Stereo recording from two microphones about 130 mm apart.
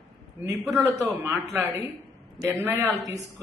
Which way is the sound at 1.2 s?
15° right (ahead or behind).